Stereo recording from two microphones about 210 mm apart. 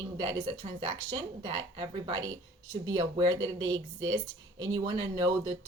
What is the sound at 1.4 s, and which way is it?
A woman's voice, 20° right (ahead or behind).